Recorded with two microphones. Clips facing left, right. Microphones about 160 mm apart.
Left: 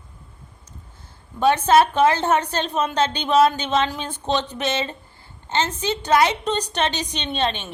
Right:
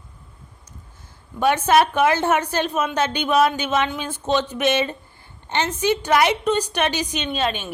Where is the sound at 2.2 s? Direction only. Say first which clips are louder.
Right 1 dB; 10° right (ahead or behind).